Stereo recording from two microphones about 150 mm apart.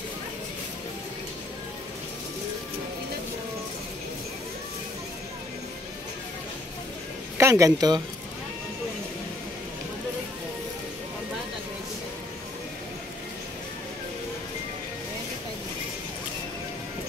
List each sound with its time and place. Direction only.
7.3 s speech: 20° right (ahead or behind)